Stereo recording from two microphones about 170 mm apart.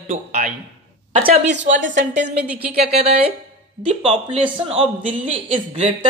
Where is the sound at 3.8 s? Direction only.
40° right (ahead or behind).